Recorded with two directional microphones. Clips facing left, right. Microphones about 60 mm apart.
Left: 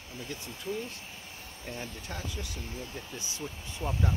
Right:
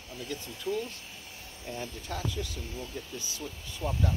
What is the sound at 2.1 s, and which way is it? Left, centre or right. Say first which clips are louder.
Speech: right 6 dB; centre.